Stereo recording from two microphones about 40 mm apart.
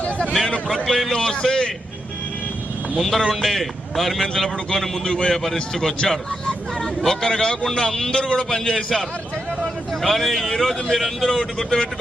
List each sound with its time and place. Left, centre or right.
0.0 s a sound: left
0.9 s speech: centre
1.2 s a man's voice: centre
2.9 s a man's voice: centre
5.5 s a man's voice: centre